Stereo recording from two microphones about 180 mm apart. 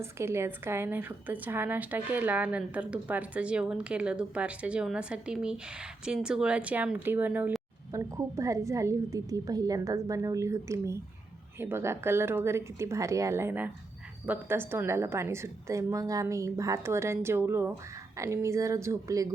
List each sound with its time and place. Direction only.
0.0 s a woman's voice: 15° right (ahead or behind)